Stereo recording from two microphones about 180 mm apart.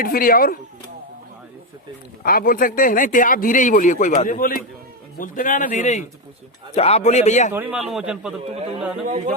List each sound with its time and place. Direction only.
0.0 s speech: 55° left (ahead or behind)
2.2 s speech: 55° left (ahead or behind)
7.5 s speech: 10° right (ahead or behind)
9.0 s speech: 45° right (ahead or behind)